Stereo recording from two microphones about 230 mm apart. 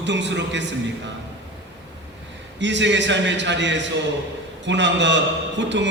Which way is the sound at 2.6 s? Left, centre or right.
Right.